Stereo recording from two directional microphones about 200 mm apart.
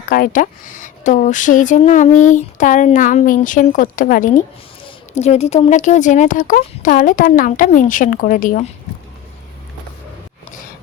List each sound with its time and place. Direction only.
0.1 s speech: 45° left (ahead or behind)